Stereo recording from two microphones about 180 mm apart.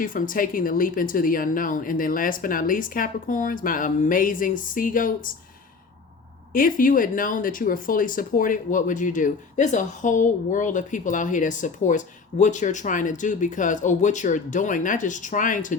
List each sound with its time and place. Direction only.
0.0 s speech: 50° left (ahead or behind)
6.5 s speech: 50° left (ahead or behind)